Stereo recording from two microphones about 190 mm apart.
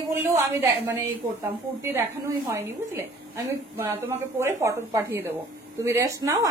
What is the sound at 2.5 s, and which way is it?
A woman's voice, 10° right (ahead or behind).